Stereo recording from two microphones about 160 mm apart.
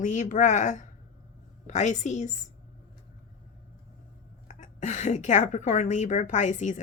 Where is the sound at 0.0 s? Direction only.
50° left (ahead or behind).